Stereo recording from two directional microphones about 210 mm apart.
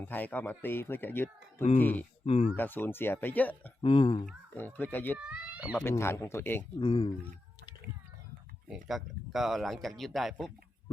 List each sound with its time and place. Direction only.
0.0 s speech: 10° left (ahead or behind)
2.2 s speech: 30° left (ahead or behind)
2.6 s speech: 10° left (ahead or behind)
3.8 s speech: 25° left (ahead or behind)
4.5 s speech: 10° left (ahead or behind)
5.1 s speech: 5° right (ahead or behind)
5.7 s speech: 10° left (ahead or behind)
6.7 s speech: 25° left (ahead or behind)
8.6 s speech: centre (ahead or behind)